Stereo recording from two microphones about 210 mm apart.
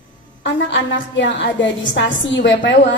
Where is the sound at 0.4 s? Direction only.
60° left (ahead or behind).